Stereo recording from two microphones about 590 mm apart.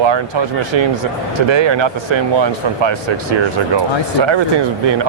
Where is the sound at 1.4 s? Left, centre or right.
Right.